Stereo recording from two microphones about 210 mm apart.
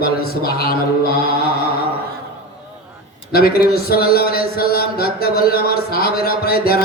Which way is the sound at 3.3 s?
45° left (ahead or behind).